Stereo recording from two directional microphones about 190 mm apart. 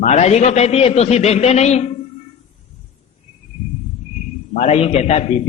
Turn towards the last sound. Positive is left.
turn(degrees=35)  # may be behind; listen again after turning